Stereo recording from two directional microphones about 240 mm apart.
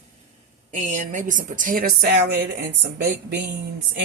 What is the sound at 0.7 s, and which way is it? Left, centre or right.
A woman's voice, right.